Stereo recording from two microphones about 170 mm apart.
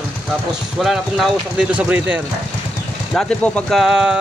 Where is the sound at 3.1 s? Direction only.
5° left (ahead or behind).